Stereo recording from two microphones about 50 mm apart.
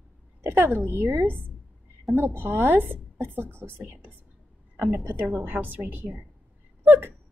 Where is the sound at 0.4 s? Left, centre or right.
Right.